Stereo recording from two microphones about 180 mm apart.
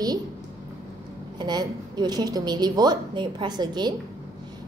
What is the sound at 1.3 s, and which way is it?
A woman's voice, 25° right (ahead or behind).